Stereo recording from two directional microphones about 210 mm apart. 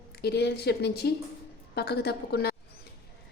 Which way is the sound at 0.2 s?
50° left (ahead or behind).